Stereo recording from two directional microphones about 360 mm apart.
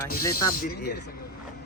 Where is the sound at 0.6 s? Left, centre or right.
Left.